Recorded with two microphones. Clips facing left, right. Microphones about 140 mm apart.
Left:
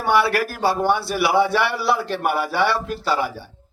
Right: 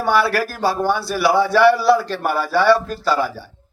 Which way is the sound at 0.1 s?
20° left (ahead or behind).